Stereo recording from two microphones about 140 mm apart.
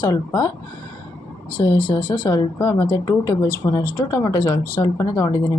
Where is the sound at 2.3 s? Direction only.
15° left (ahead or behind).